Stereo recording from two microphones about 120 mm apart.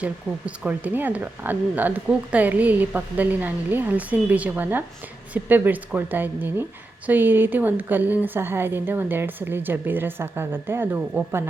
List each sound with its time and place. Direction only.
0.0 s speech: 10° right (ahead or behind)